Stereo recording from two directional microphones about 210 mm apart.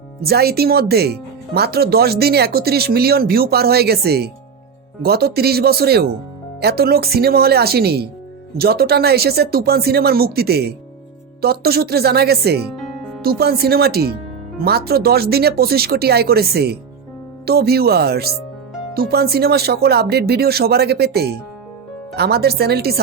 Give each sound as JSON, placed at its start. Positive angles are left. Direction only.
{"t": 0.2, "sound": "speech", "side_deg": -50}
{"t": 12.8, "sound": "music", "side_deg": 0}
{"t": 13.2, "sound": "speech", "side_deg": -50}